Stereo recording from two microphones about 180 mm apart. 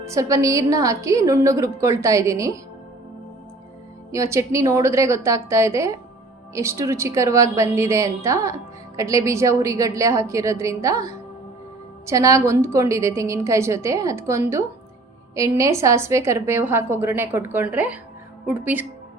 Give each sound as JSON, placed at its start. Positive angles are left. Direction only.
{"t": 0.0, "sound": "speech", "side_deg": -15}
{"t": 4.1, "sound": "speech", "side_deg": -15}